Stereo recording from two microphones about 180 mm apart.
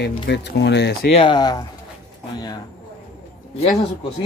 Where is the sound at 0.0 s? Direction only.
70° left (ahead or behind).